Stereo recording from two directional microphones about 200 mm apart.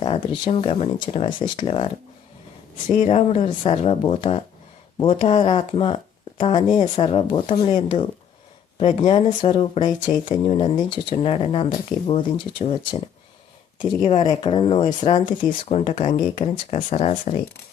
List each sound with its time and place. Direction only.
0.0 s speech: 25° left (ahead or behind)
3.0 s speech: 30° left (ahead or behind)
14.3 s speech: 25° left (ahead or behind)